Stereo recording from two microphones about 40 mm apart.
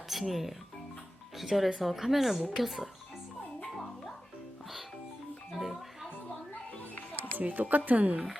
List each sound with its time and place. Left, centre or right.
0.1 s speech: centre
5.5 s music: centre
7.3 s speech: right